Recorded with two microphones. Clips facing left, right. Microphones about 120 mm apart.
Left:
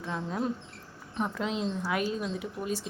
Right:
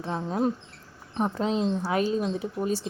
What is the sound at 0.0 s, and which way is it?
Speech, 35° right (ahead or behind).